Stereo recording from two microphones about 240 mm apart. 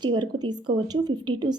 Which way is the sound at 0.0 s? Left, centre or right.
Centre.